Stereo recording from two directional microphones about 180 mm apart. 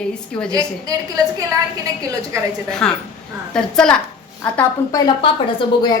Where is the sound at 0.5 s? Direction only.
20° right (ahead or behind).